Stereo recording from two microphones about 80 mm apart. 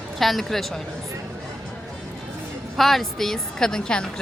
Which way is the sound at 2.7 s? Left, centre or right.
Centre.